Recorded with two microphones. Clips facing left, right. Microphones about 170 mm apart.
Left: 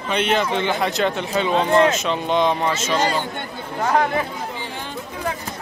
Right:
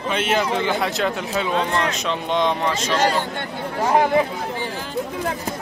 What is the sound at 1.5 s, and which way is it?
Speech, 30° left (ahead or behind).